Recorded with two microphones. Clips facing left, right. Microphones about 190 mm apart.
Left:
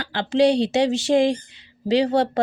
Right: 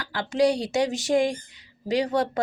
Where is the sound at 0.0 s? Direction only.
25° left (ahead or behind).